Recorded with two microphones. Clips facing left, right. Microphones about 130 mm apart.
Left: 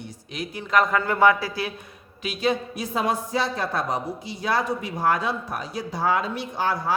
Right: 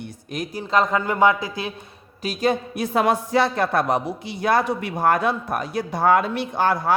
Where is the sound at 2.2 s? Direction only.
45° right (ahead or behind).